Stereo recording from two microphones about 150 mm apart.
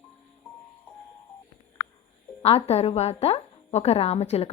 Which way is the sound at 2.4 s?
40° left (ahead or behind).